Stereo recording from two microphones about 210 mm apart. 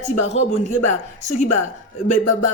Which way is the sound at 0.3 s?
35° left (ahead or behind).